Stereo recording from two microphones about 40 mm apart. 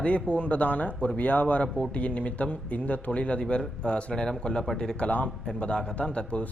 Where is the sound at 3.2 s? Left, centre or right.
Left.